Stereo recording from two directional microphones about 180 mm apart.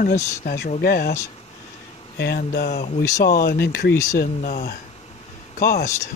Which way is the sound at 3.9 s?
20° left (ahead or behind).